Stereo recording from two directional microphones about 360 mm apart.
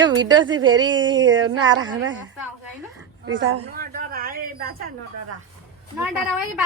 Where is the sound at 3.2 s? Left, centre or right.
Right.